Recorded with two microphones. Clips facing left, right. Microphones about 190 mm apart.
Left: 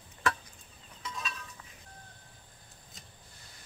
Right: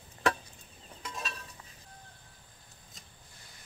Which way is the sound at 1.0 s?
45° right (ahead or behind).